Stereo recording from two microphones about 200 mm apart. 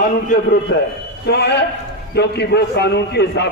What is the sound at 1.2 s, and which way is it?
A man's voice, 55° left (ahead or behind).